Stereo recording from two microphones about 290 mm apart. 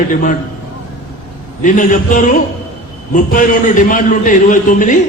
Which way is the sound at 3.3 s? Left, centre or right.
Left.